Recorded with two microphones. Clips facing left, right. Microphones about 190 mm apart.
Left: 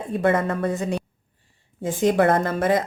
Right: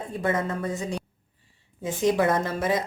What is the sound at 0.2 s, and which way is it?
A woman's voice, 65° left (ahead or behind).